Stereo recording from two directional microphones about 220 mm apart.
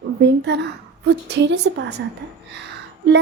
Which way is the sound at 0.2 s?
50° right (ahead or behind).